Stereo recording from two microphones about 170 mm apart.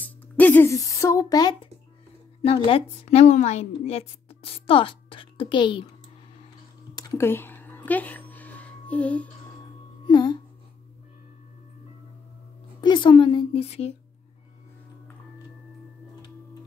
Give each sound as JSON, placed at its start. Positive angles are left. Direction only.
{"t": 0.0, "sound": "a woman's voice", "side_deg": 10}
{"t": 7.0, "sound": "a sound", "side_deg": 20}
{"t": 10.0, "sound": "music", "side_deg": 25}
{"t": 12.8, "sound": "a woman's voice", "side_deg": 25}